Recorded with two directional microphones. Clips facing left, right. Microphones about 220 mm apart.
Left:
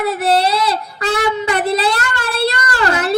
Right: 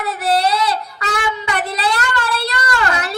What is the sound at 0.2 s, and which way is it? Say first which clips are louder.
Child singing: right 2 dB; 30° left (ahead or behind).